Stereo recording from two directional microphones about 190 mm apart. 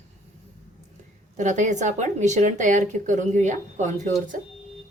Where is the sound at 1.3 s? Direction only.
40° right (ahead or behind).